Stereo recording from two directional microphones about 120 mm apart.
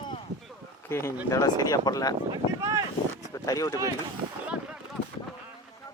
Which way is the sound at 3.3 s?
30° left (ahead or behind).